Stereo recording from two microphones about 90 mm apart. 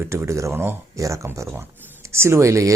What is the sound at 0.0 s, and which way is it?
Speech, 30° right (ahead or behind).